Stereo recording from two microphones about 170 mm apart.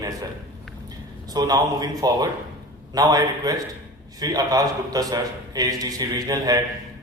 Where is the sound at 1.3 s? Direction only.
20° right (ahead or behind).